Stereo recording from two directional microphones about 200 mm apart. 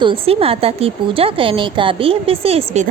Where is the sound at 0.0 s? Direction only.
25° right (ahead or behind).